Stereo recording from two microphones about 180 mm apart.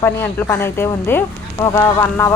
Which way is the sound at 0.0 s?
10° left (ahead or behind).